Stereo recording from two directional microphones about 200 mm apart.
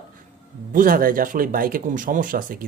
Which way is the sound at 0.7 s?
45° right (ahead or behind).